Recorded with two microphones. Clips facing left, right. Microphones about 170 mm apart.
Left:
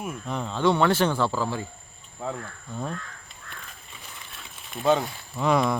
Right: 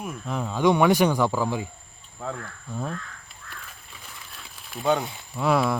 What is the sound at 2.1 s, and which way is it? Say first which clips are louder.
Speech: left 1 dB; 10° left (ahead or behind).